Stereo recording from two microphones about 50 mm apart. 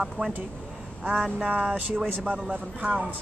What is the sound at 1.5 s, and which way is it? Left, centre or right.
A woman's voice, right.